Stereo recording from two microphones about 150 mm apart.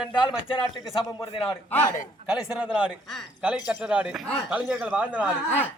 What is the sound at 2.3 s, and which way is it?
A man's voice, 5° right (ahead or behind).